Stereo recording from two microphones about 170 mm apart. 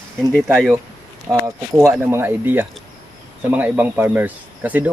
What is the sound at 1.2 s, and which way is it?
Speech, 15° right (ahead or behind).